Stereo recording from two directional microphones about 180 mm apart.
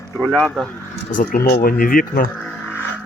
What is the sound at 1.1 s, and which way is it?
Speech, 45° left (ahead or behind).